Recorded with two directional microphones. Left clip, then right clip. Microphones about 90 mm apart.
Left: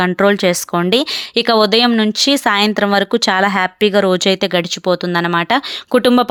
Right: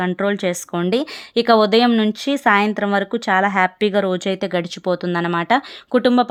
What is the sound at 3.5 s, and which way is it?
Speech, 15° left (ahead or behind).